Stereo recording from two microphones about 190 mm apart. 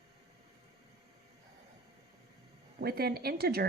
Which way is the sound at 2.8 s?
55° right (ahead or behind).